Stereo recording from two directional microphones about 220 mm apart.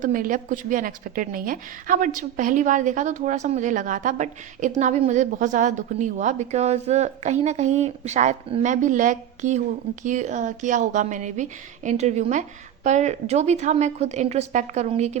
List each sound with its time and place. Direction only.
0.0 s a woman's voice: 35° right (ahead or behind)